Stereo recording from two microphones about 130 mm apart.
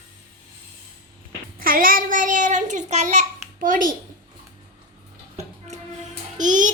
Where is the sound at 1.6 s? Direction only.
90° right.